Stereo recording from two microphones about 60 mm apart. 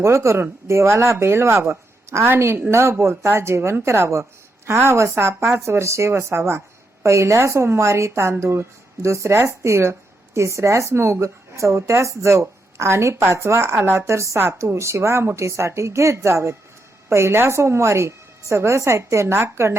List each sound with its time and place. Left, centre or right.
0.0 s a woman's voice: right